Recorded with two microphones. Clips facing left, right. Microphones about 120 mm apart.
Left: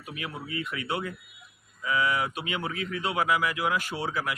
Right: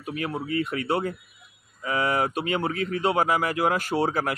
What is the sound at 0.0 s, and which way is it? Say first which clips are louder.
A man's voice: right 8 dB; 40° right (ahead or behind).